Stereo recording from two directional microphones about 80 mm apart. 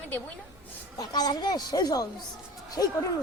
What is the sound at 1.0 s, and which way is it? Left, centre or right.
Speech, left.